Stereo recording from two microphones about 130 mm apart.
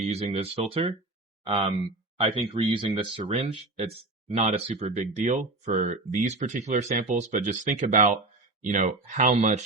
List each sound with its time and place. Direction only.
0.1 s speech: 55° right (ahead or behind)